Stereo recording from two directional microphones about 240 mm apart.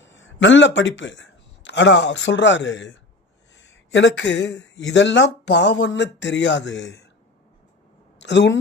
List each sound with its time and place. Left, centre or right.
0.0 s a man's voice: left
8.2 s speech: left